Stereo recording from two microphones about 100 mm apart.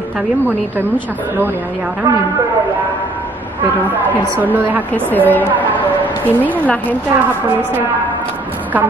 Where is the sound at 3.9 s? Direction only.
20° right (ahead or behind).